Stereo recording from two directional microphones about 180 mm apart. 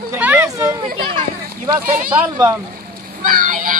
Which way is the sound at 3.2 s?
50° right (ahead or behind).